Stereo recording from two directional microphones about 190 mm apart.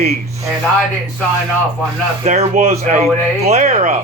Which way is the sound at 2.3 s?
35° right (ahead or behind).